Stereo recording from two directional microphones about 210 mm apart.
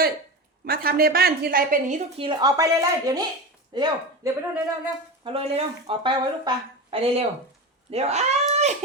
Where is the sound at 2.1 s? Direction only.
25° right (ahead or behind).